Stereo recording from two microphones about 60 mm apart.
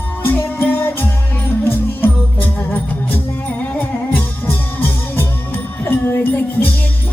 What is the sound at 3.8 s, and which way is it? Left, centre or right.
Music, left.